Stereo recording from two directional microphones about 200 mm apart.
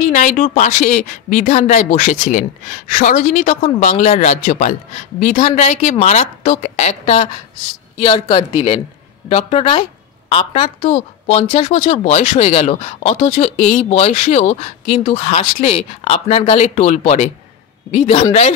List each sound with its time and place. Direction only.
0.0 s speech: 40° left (ahead or behind)